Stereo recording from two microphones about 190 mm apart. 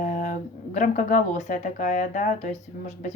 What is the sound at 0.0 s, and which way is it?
Speech, 40° left (ahead or behind).